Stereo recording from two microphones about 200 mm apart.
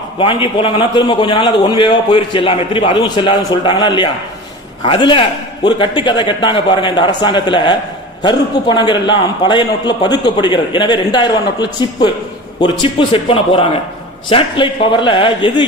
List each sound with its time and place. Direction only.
0.2 s a man's voice: 25° left (ahead or behind)